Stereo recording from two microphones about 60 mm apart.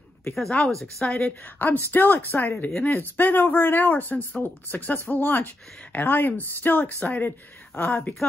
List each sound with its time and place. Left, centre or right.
0.3 s speech: centre
1.0 s a woman's voice: left